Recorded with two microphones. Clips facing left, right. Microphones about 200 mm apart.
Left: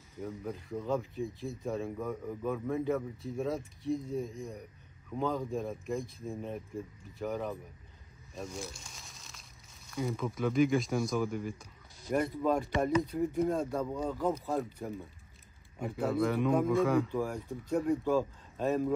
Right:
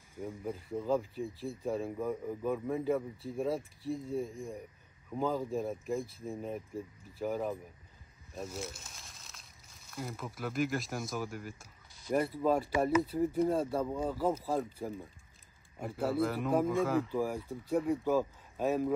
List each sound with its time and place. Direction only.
0.1 s speech: 10° right (ahead or behind)
4.0 s speech: 30° right (ahead or behind)
5.1 s speech: 5° right (ahead or behind)